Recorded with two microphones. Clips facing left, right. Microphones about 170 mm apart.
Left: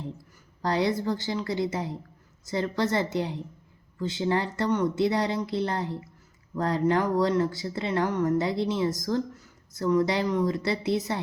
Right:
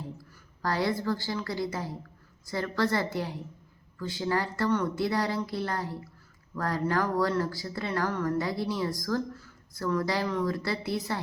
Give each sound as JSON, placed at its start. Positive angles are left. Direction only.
{"t": 0.6, "sound": "speech", "side_deg": 20}